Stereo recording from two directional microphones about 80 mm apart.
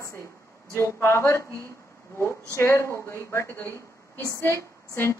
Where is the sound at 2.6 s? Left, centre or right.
Left.